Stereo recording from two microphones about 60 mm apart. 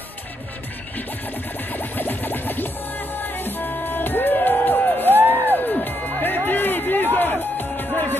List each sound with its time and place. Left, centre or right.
1.7 s music: left